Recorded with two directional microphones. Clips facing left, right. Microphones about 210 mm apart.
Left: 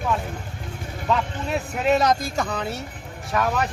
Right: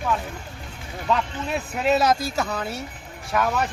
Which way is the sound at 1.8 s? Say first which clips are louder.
Even; 5° right (ahead or behind).